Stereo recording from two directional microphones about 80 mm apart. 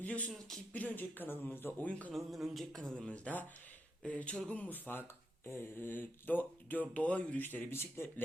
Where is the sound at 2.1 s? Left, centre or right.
Centre; by 8.2 s left.